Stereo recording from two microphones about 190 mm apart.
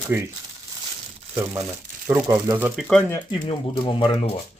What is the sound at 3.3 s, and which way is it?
Speech, 25° left (ahead or behind).